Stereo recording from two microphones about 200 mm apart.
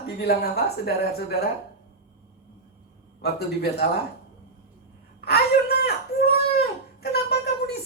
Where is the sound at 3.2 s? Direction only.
55° left (ahead or behind).